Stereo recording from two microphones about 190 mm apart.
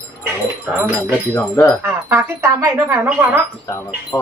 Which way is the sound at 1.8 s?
10° right (ahead or behind).